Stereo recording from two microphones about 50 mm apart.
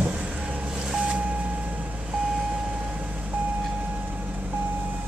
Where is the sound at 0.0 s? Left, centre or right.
Right.